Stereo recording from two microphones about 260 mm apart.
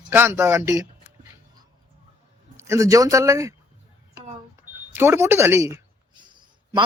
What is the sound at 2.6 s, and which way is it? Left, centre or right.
Speech, centre.